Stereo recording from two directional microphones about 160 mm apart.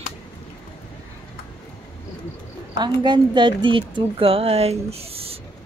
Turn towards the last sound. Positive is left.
turn(degrees=-35)  # may be behind; listen again after turning